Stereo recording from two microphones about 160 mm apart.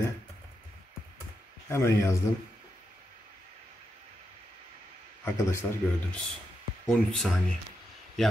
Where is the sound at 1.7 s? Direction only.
15° left (ahead or behind).